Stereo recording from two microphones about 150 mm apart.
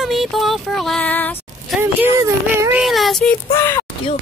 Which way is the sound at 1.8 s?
15° right (ahead or behind).